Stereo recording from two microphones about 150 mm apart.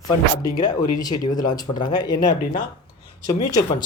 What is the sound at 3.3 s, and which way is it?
Speech, 30° left (ahead or behind).